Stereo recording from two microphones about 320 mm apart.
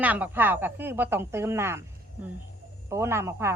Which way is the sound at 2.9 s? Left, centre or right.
Centre.